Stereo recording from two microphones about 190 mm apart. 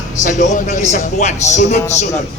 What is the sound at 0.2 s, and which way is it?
A man's voice, 40° left (ahead or behind).